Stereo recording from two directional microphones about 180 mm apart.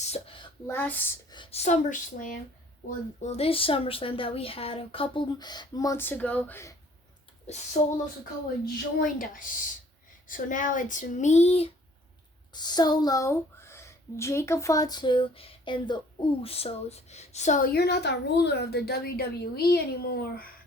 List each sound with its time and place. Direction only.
0.0 s a sound: 35° left (ahead or behind)
0.7 s speech: 10° left (ahead or behind)
1.3 s speech: 30° left (ahead or behind); by 6.7 s 15° left (ahead or behind)
7.4 s speech: 40° left (ahead or behind)
9.0 s speech: 50° left (ahead or behind)
12.5 s a woman's voice: 25° left (ahead or behind); by 20.5 s 55° left (ahead or behind)